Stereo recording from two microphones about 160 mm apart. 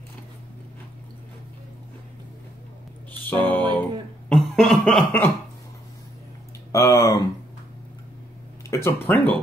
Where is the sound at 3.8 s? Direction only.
5° left (ahead or behind).